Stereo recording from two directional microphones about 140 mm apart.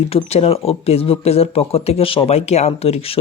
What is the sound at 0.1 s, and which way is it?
Speech, 45° left (ahead or behind).